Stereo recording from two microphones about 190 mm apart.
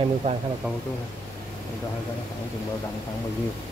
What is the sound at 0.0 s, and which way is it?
Speech, 35° right (ahead or behind).